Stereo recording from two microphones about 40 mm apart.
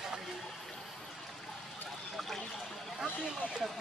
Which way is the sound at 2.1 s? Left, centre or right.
Centre.